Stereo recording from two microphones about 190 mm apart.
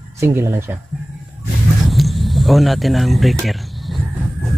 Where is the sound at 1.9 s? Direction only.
Centre (ahead or behind).